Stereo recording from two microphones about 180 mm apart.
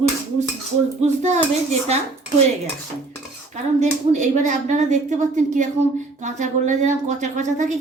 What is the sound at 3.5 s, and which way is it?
A woman's voice, 40° right (ahead or behind).